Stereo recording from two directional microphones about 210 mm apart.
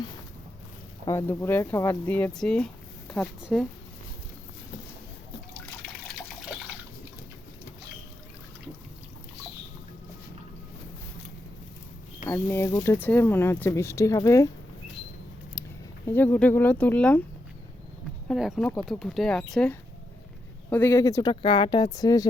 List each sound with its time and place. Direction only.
1.0 s speech: 10° left (ahead or behind)
12.2 s speech: 10° left (ahead or behind)
16.0 s speech: 10° left (ahead or behind)
18.3 s speech: centre (ahead or behind); by 22.3 s 15° left (ahead or behind)